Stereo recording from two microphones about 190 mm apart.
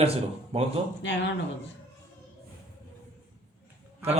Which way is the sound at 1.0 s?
70° left (ahead or behind).